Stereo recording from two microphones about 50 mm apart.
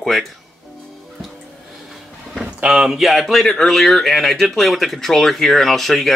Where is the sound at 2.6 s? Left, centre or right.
Centre.